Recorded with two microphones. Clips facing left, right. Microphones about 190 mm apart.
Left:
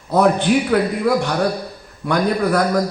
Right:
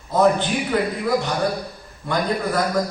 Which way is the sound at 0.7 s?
65° left (ahead or behind).